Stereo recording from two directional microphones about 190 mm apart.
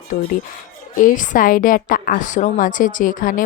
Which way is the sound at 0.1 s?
50° left (ahead or behind).